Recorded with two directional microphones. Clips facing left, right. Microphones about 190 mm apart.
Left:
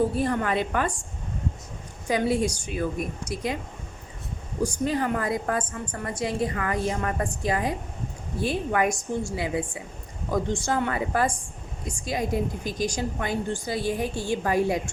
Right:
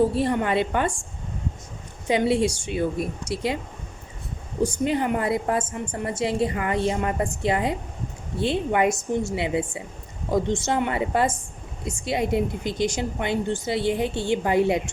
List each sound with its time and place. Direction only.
0.2 s a woman's voice: 25° right (ahead or behind)
2.0 s a woman's voice: 25° right (ahead or behind)
4.6 s a woman's voice: 25° right (ahead or behind)